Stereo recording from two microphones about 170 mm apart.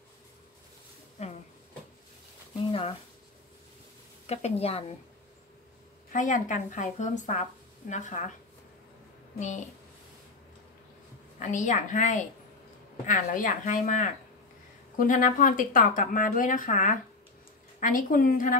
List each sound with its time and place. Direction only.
1.2 s a sound: 40° left (ahead or behind)
4.3 s a woman's voice: 40° left (ahead or behind)
6.1 s speech: 50° left (ahead or behind)
11.3 s speech: 45° left (ahead or behind)